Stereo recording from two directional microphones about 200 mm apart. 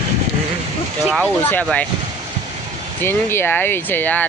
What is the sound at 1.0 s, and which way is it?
Speech, centre (ahead or behind).